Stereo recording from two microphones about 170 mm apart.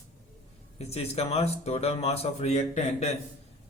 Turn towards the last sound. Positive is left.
turn(degrees=40)  # may be behind; listen again after turning